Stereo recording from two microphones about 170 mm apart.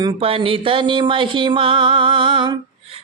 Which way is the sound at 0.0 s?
35° right (ahead or behind).